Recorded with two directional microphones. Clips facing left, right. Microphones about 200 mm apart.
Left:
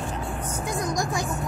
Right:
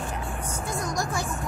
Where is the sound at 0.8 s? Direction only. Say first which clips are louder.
Left 2 dB; 15° left (ahead or behind).